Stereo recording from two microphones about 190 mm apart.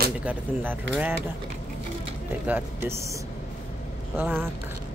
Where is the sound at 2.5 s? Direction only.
10° right (ahead or behind).